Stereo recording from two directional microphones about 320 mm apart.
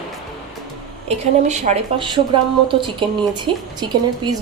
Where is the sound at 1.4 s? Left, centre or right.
Right.